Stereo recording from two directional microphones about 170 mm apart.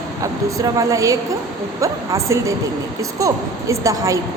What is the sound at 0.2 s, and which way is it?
A woman's voice, 20° right (ahead or behind).